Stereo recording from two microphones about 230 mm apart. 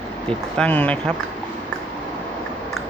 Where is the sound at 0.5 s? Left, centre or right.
Centre.